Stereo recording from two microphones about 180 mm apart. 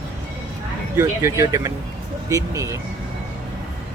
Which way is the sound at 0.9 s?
15° right (ahead or behind).